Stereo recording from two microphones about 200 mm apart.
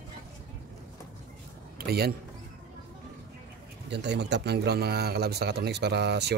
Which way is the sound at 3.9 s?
60° right (ahead or behind).